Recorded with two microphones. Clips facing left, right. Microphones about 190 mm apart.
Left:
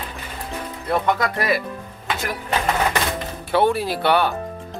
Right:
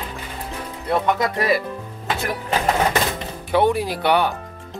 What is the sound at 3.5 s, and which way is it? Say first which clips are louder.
Speech: even; 15° right (ahead or behind).